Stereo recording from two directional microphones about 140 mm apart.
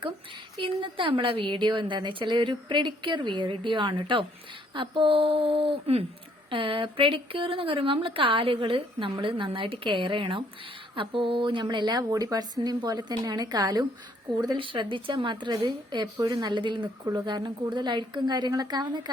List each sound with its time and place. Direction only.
0.6 s a woman's voice: 35° right (ahead or behind)